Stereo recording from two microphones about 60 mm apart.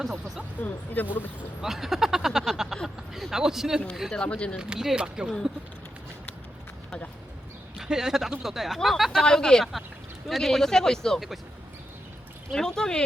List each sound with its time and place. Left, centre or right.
1.0 s speech: left
1.6 s speech: centre
4.1 s speech: centre
4.7 s speech: centre
7.8 s speech: centre
9.1 s speech: centre
12.5 s speech: centre